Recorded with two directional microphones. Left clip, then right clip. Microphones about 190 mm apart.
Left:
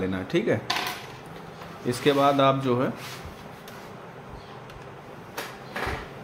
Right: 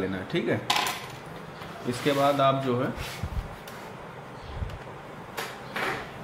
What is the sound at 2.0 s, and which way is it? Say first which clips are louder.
Speech: left 2 dB; 55° left (ahead or behind).